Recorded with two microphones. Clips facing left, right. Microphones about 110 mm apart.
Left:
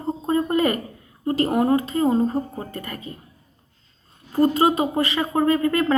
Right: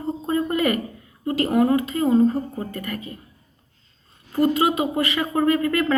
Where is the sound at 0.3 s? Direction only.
30° left (ahead or behind).